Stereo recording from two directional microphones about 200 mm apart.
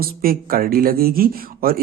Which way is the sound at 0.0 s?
50° right (ahead or behind).